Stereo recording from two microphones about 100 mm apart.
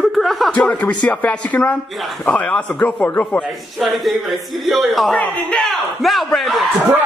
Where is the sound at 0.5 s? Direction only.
10° left (ahead or behind).